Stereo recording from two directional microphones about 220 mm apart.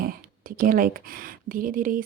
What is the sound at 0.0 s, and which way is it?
Speech, 40° right (ahead or behind).